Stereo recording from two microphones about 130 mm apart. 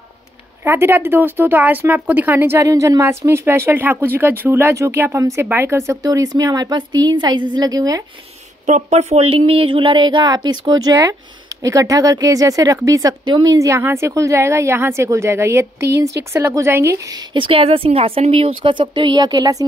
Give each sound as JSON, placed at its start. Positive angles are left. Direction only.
{"t": 0.7, "sound": "speech", "side_deg": -15}
{"t": 8.6, "sound": "a woman's voice", "side_deg": -60}